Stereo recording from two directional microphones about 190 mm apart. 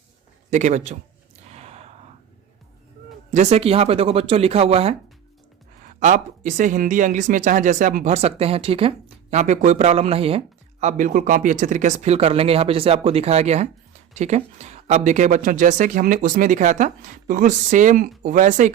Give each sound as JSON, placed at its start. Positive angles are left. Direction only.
{"t": 0.5, "sound": "speech", "side_deg": -40}
{"t": 1.5, "sound": "a sound", "side_deg": -35}
{"t": 3.3, "sound": "speech", "side_deg": -35}
{"t": 5.8, "sound": "speech", "side_deg": -40}